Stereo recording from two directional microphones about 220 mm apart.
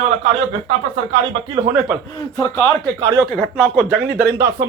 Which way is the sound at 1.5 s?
20° right (ahead or behind).